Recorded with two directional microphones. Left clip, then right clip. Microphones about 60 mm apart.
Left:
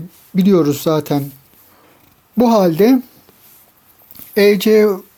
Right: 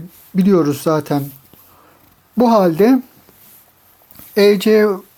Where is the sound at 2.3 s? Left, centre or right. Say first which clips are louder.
Even; left.